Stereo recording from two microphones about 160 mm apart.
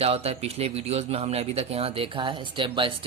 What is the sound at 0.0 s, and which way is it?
Speech, 40° right (ahead or behind).